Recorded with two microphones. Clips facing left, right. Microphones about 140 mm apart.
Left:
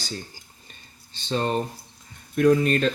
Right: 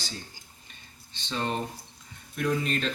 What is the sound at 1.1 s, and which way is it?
Speech, 35° left (ahead or behind).